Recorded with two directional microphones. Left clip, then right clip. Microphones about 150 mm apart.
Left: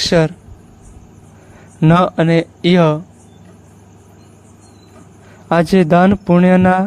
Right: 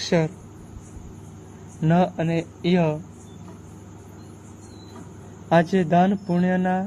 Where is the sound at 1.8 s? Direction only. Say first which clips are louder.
Left 9 dB; 90° left.